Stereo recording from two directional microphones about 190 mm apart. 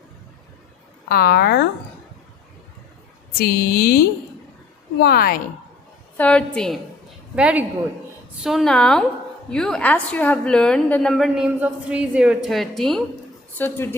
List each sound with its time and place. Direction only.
1.0 s speech: 55° left (ahead or behind)
3.3 s speech: 55° left (ahead or behind)
6.1 s a woman's voice: 5° left (ahead or behind)
13.6 s speech: 10° left (ahead or behind)